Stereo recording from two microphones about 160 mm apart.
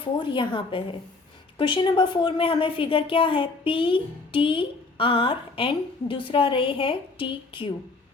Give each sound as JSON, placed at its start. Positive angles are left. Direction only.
{"t": 0.0, "sound": "a woman's voice", "side_deg": 30}